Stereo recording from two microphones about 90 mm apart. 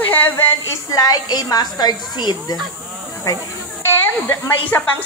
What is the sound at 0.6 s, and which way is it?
A woman's voice, 40° left (ahead or behind).